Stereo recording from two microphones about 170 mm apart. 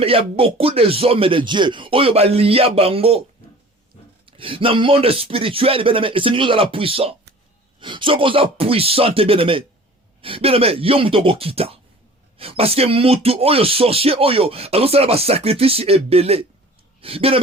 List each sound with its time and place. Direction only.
0.0 s speech: 35° right (ahead or behind)
4.3 s speech: 30° right (ahead or behind)